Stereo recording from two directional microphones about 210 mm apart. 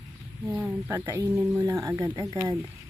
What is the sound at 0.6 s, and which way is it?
Speech, 10° right (ahead or behind).